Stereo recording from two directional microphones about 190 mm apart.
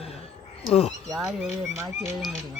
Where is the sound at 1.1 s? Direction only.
Centre (ahead or behind).